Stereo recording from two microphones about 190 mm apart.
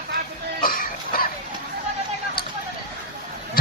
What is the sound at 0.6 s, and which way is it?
Cough, 50° left (ahead or behind).